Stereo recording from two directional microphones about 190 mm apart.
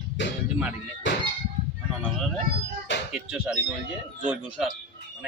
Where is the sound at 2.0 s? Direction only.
Centre (ahead or behind).